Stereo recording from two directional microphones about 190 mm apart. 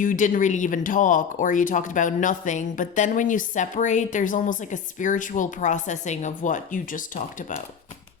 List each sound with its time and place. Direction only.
0.0 s speech: 45° left (ahead or behind)